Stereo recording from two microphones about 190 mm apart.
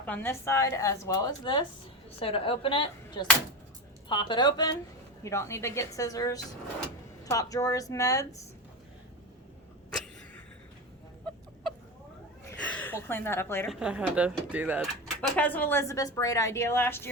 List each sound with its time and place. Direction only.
0.0 s speech: 10° left (ahead or behind)
9.9 s a sound: 5° left (ahead or behind)
12.6 s speech: 10° left (ahead or behind)
13.7 s speech: 5° right (ahead or behind); by 17.1 s 10° left (ahead or behind)